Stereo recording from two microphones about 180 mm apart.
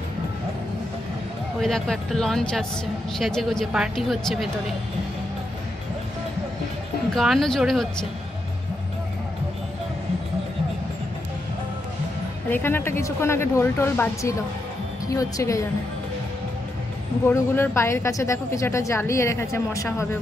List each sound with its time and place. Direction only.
1.6 s a woman's voice: 5° left (ahead or behind)
7.2 s a woman's voice: centre (ahead or behind)
12.4 s speech: 10° left (ahead or behind)
17.3 s speech: 15° left (ahead or behind)